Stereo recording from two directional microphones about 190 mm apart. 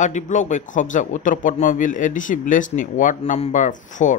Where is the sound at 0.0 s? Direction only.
40° left (ahead or behind).